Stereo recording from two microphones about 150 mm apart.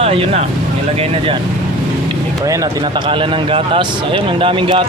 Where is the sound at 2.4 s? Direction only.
20° right (ahead or behind).